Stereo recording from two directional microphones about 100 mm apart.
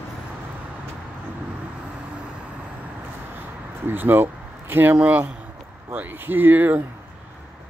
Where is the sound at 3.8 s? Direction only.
20° right (ahead or behind).